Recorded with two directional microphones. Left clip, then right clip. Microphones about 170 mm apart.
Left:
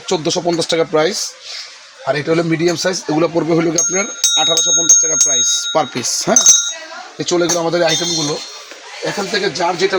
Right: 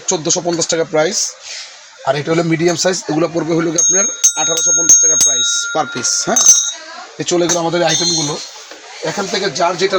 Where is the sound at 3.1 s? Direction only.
20° left (ahead or behind); by 6.4 s 35° left (ahead or behind).